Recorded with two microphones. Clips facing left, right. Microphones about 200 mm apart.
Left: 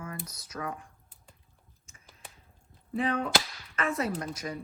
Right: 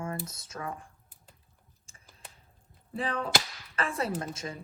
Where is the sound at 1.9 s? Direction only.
30° right (ahead or behind).